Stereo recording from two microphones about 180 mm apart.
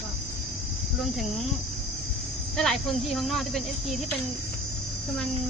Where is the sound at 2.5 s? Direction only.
Centre (ahead or behind).